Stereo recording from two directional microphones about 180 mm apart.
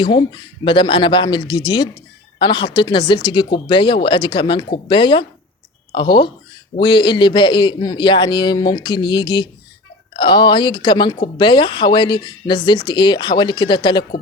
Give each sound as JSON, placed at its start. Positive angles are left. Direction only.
{"t": 0.0, "sound": "a man's voice", "side_deg": 25}